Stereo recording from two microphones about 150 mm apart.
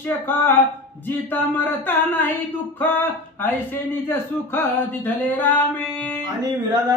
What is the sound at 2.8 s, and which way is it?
Speech, 15° left (ahead or behind).